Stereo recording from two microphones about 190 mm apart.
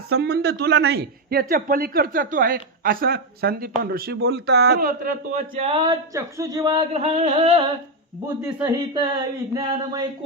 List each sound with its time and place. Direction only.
0.1 s speech: 60° right (ahead or behind)
4.2 s a man's voice: 70° right (ahead or behind); by 5.6 s 45° right (ahead or behind)
5.6 s speech: 25° right (ahead or behind)
6.7 s a sound: 35° right (ahead or behind)
8.4 s speech: 15° right (ahead or behind)